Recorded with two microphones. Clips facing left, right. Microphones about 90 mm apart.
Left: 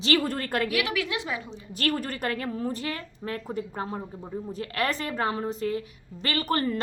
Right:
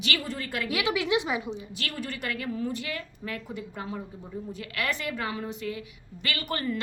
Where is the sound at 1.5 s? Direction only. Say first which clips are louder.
Left 7 dB; 45° left (ahead or behind).